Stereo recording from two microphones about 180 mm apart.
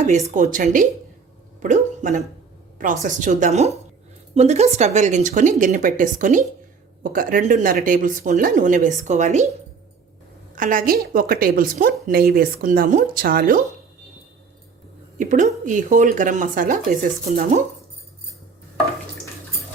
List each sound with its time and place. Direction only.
0.0 s a woman's voice: 40° right (ahead or behind)
10.5 s a woman's voice: 45° right (ahead or behind)
15.2 s a woman's voice: 45° right (ahead or behind)